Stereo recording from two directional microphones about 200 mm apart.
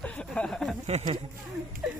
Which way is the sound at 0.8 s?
30° right (ahead or behind).